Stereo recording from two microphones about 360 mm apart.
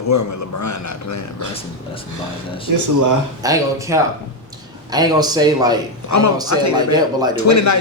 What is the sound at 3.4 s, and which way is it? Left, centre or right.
Speech, centre.